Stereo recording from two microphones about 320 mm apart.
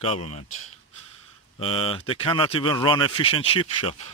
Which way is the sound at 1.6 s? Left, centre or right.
Centre.